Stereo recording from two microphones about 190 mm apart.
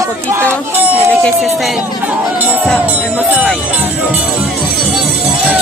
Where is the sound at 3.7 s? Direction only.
5° right (ahead or behind).